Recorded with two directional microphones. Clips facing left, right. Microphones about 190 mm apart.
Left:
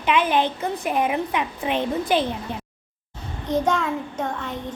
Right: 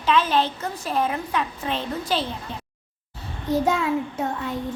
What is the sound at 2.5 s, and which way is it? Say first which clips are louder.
Speech: left 4 dB; 55° left (ahead or behind).